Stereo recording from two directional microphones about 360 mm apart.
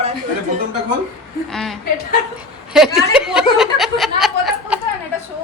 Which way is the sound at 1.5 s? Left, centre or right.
Centre.